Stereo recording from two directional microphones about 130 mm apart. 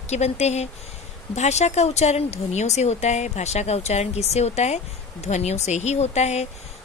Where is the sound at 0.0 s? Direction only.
60° left (ahead or behind).